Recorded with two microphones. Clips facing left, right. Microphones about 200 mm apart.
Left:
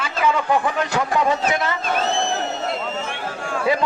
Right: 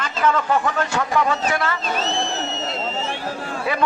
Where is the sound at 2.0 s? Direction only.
55° left (ahead or behind).